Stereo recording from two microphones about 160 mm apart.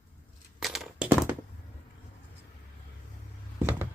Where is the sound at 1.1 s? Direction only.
10° right (ahead or behind).